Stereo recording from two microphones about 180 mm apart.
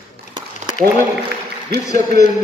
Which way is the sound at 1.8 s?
20° left (ahead or behind).